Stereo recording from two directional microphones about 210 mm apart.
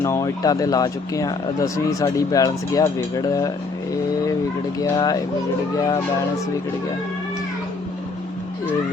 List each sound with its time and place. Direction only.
0.0 s speech: 15° left (ahead or behind)
4.8 s speech: 15° left (ahead or behind)